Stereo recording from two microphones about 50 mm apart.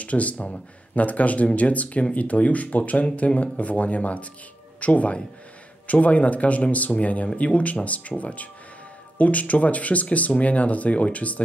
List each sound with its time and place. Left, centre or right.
0.0 s speech: left